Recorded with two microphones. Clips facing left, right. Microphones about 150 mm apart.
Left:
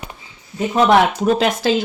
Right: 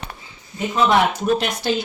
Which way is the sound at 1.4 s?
90° left.